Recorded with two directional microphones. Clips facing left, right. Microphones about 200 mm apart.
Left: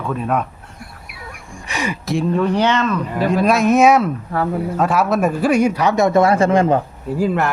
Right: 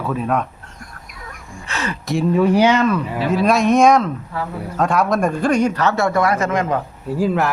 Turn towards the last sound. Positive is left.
turn(degrees=0)  # may be behind; listen again after turning